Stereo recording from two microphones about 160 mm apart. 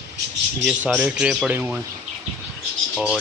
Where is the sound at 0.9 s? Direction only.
5° right (ahead or behind).